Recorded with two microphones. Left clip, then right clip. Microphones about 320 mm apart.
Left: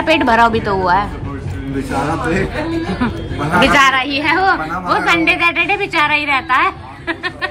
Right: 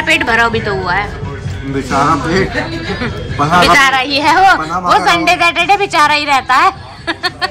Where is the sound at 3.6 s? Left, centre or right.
Centre.